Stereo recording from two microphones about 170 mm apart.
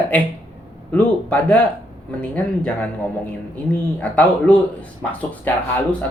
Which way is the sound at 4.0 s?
10° left (ahead or behind).